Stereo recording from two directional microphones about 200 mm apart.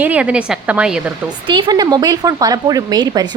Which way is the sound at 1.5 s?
25° right (ahead or behind).